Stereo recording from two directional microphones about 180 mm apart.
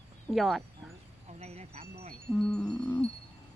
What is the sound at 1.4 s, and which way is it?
Wind chime, 35° right (ahead or behind).